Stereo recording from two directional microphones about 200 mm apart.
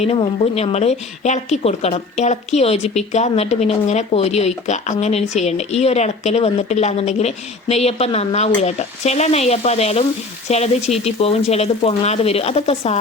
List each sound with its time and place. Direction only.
0.0 s speech: 30° left (ahead or behind)